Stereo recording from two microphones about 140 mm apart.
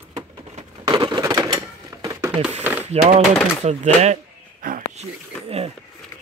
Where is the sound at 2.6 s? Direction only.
15° right (ahead or behind).